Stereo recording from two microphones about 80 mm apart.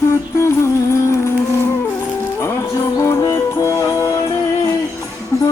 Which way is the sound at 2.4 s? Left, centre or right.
Left.